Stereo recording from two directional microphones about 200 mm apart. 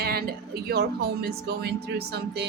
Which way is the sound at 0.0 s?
50° right (ahead or behind).